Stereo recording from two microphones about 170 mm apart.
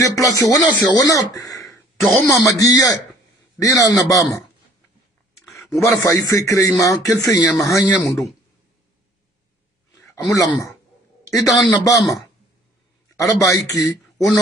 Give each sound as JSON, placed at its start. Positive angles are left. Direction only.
{"t": 0.0, "sound": "speech", "side_deg": 20}
{"t": 2.0, "sound": "speech", "side_deg": 0}
{"t": 2.4, "sound": "speech", "side_deg": 20}
{"t": 5.4, "sound": "a man's voice", "side_deg": 20}
{"t": 9.9, "sound": "a sound", "side_deg": 20}
{"t": 11.4, "sound": "speech", "side_deg": 0}
{"t": 11.8, "sound": "speech", "side_deg": 20}
{"t": 13.8, "sound": "a sound", "side_deg": 0}